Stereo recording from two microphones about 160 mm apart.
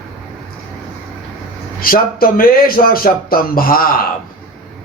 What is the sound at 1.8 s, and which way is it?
Speech, 65° left (ahead or behind).